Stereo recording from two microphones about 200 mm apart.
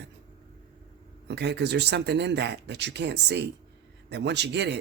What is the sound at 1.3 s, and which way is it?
A man's voice, 60° right (ahead or behind).